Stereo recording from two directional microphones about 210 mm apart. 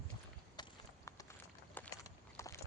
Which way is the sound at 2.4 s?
15° left (ahead or behind).